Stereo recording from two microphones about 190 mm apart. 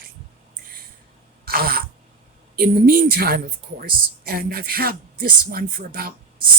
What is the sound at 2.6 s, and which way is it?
Speech, 50° right (ahead or behind).